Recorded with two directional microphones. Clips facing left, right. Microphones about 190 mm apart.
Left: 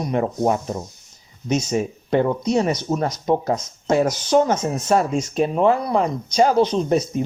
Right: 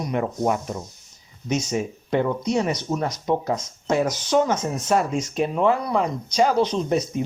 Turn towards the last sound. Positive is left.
turn(degrees=40)  # may be behind; listen again after turning